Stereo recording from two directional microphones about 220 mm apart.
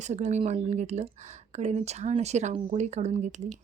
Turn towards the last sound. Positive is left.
turn(degrees=-35)  # may be behind; listen again after turning